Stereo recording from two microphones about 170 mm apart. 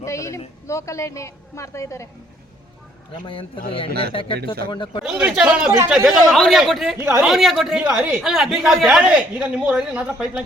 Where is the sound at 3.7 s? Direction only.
30° left (ahead or behind).